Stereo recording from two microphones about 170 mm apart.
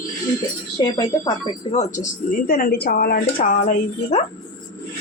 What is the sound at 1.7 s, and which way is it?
Speech, 40° left (ahead or behind).